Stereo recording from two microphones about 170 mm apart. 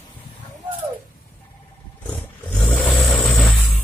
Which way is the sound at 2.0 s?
5° left (ahead or behind).